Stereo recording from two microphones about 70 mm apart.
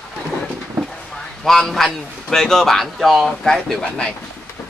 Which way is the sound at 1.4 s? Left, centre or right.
Centre.